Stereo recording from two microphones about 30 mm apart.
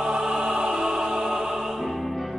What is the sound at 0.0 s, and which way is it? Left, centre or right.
Music, right.